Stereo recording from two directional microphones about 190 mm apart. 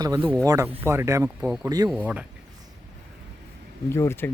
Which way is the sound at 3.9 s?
15° left (ahead or behind).